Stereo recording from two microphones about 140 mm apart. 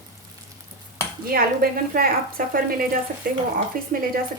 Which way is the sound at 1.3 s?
90° right.